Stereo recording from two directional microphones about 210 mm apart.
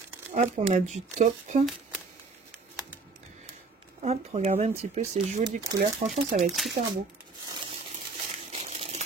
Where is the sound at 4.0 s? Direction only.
30° right (ahead or behind).